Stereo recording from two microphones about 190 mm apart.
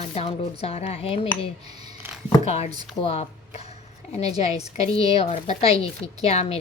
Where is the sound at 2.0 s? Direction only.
10° right (ahead or behind).